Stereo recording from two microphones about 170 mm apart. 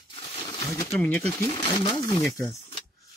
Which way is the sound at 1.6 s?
25° left (ahead or behind).